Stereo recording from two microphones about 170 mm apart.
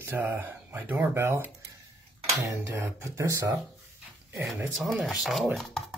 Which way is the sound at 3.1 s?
20° right (ahead or behind).